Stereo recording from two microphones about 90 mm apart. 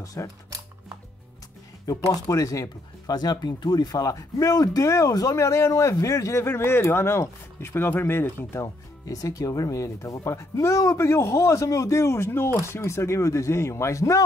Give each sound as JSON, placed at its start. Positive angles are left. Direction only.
{"t": 0.0, "sound": "speech", "side_deg": 40}
{"t": 1.9, "sound": "speech", "side_deg": 40}
{"t": 8.6, "sound": "speech", "side_deg": 40}